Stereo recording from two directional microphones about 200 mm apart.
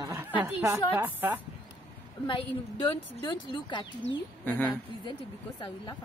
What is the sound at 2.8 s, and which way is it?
Speech, 25° left (ahead or behind).